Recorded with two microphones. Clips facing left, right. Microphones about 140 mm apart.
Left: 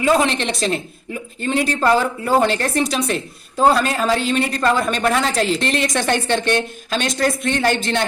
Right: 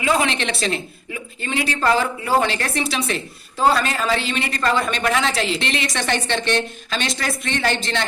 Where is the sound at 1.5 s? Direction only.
45° left (ahead or behind).